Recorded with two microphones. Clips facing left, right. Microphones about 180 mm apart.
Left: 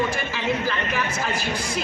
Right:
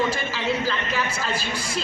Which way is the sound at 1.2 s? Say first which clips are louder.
Left 2 dB; 15° left (ahead or behind).